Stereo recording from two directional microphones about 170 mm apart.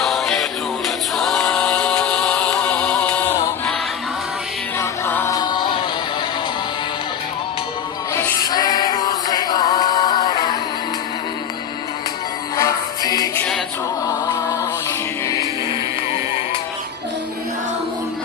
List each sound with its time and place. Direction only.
0.0 s music: centre (ahead or behind)
1.1 s a capella: centre (ahead or behind)
4.8 s music: 15° left (ahead or behind)
8.1 s music: 20° left (ahead or behind)
12.5 s music: 20° left (ahead or behind)
13.3 s a capella: 10° left (ahead or behind)